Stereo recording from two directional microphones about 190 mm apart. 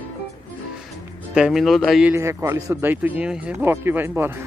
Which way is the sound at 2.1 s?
15° right (ahead or behind).